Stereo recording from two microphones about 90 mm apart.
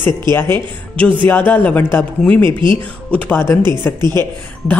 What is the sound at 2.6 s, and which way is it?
Speech, 60° right (ahead or behind).